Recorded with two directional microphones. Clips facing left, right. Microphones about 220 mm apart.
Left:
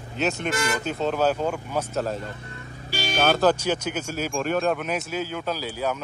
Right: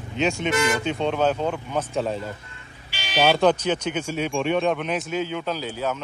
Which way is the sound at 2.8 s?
40° left (ahead or behind).